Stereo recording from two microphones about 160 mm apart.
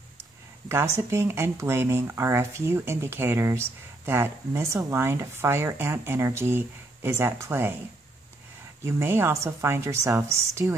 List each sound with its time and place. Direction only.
0.7 s speech: 15° right (ahead or behind)
8.8 s speech: 15° right (ahead or behind)